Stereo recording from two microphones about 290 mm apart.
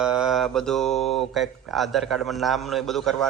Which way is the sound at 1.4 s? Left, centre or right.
Centre.